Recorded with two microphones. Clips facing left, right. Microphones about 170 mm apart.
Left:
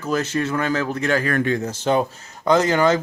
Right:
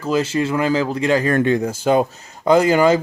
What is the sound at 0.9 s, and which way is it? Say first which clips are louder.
Speech: right 3 dB; 30° right (ahead or behind).